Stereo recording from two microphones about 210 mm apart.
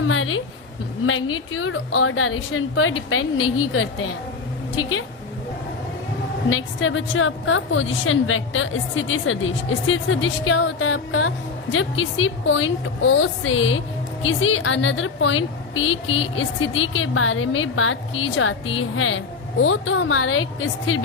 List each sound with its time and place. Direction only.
0.0 s a woman's voice: 70° left (ahead or behind)
6.5 s a woman's voice: 70° left (ahead or behind)